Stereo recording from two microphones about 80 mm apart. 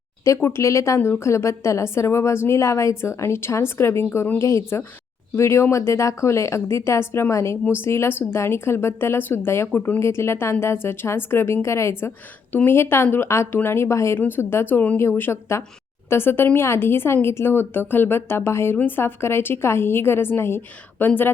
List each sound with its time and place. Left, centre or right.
0.3 s a woman's voice: left
12.5 s a woman's voice: left